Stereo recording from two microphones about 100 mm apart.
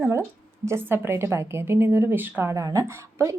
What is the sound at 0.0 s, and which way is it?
A woman's voice, 25° right (ahead or behind).